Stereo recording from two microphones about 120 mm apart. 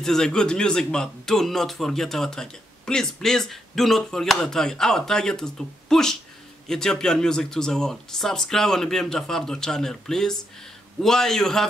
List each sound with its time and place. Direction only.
0.0 s speech: 5° left (ahead or behind)